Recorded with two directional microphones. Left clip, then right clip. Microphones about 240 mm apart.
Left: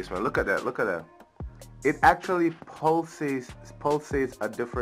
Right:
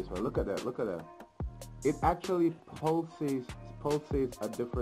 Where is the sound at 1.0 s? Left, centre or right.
Centre.